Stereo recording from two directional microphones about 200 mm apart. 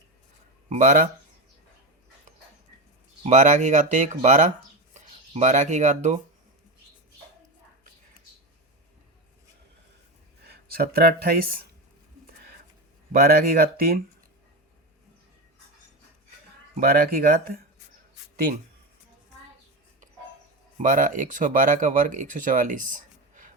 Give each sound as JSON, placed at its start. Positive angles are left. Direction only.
{"t": 0.7, "sound": "speech", "side_deg": -40}
{"t": 3.2, "sound": "speech", "side_deg": -35}
{"t": 10.5, "sound": "speech", "side_deg": -50}
{"t": 13.1, "sound": "speech", "side_deg": -50}
{"t": 16.7, "sound": "speech", "side_deg": -45}
{"t": 20.7, "sound": "speech", "side_deg": -40}